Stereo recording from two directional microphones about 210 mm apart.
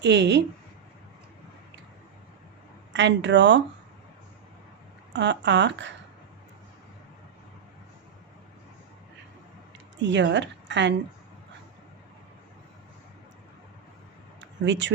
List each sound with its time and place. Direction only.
0.0 s speech: 55° right (ahead or behind)
2.9 s speech: 60° right (ahead or behind)
5.1 s speech: 55° right (ahead or behind)
10.0 s a woman's voice: 60° right (ahead or behind)
14.6 s speech: 60° right (ahead or behind)